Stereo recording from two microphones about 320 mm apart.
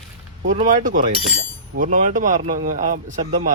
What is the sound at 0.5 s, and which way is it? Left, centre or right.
A man's voice, right.